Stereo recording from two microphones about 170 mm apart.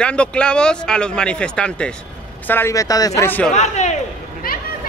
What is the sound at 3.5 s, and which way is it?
Speech, 45° left (ahead or behind).